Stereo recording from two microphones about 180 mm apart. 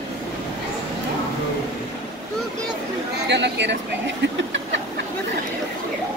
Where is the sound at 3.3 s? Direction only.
75° right (ahead or behind).